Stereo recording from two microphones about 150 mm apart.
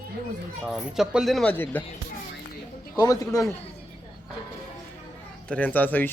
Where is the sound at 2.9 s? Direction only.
20° left (ahead or behind).